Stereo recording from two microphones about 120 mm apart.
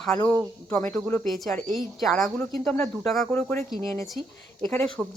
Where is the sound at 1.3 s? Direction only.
Centre (ahead or behind).